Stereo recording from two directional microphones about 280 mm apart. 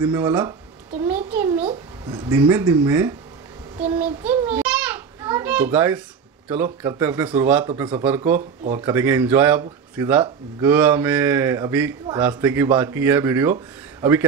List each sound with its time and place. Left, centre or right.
0.0 s a man's voice: centre
1.0 s a sound: centre
1.7 s a man's voice: centre
4.0 s children playing: centre
6.5 s a man's voice: centre